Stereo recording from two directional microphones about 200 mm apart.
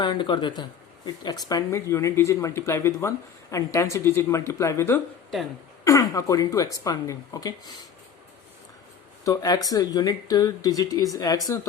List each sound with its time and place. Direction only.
0.0 s speech: 25° left (ahead or behind)
9.2 s speech: 15° left (ahead or behind)